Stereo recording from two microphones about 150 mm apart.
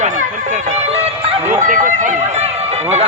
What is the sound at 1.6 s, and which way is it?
Speech, 60° right (ahead or behind).